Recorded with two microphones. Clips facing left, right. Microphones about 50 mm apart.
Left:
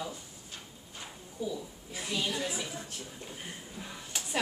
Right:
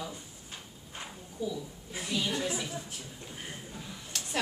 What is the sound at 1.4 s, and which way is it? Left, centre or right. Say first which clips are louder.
A woman's voice: right 1 dB; centre.